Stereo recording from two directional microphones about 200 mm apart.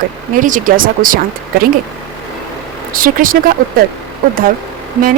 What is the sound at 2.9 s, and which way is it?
Speech, 45° right (ahead or behind).